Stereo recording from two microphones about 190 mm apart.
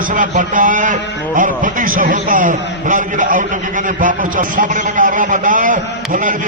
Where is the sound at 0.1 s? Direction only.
45° right (ahead or behind).